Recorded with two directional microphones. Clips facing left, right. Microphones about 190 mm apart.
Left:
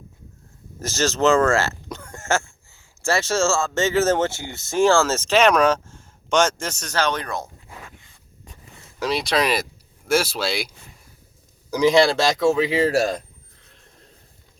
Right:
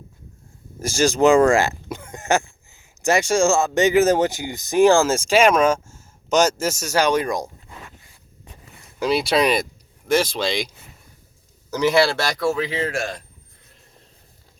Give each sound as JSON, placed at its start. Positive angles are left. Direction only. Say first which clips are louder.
{"t": 0.8, "sound": "speech", "louder": "right 4 dB", "side_deg": -10}
{"t": 9.0, "sound": "speech", "louder": "right 3 dB", "side_deg": 0}
{"t": 11.7, "sound": "speech", "louder": "left 2 dB", "side_deg": 15}
{"t": 12.7, "sound": "speech", "louder": "left 6 dB", "side_deg": 35}